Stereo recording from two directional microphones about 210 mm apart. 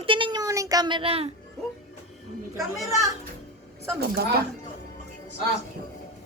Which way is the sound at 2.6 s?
Centre (ahead or behind).